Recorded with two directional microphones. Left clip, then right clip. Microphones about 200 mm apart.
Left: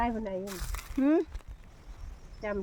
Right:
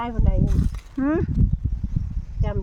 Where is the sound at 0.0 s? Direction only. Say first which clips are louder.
Right 2 dB; 10° right (ahead or behind).